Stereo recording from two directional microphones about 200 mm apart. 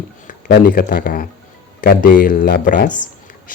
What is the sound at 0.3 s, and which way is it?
Speech, 45° left (ahead or behind).